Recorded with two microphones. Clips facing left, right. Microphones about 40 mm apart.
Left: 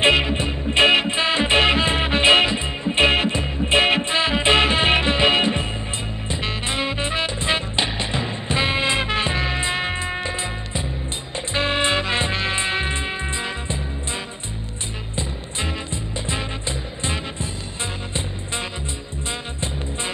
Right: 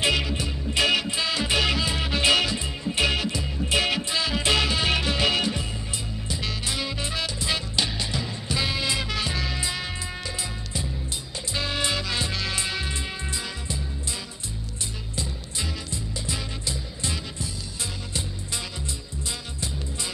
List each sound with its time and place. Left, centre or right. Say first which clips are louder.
0.0 s music: left 7 dB; left
15.1 s music: left 5 dB; left